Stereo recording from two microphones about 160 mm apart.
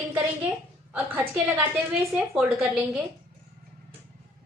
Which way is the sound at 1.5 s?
10° right (ahead or behind).